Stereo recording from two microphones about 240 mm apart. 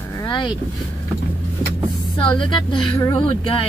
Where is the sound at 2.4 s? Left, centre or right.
Centre.